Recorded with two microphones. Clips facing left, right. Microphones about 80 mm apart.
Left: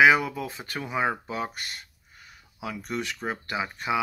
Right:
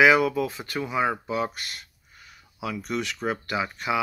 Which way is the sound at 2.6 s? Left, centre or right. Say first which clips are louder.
Right 3 dB; left.